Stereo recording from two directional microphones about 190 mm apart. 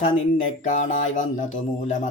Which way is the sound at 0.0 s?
40° left (ahead or behind).